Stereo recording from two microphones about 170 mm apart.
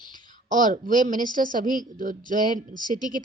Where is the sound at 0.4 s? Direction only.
50° right (ahead or behind).